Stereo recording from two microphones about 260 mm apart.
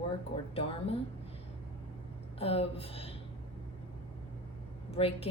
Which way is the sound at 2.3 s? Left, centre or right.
Left.